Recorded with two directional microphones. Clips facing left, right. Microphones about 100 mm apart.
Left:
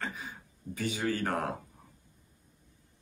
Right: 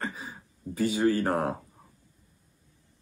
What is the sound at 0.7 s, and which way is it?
Speech, 40° right (ahead or behind).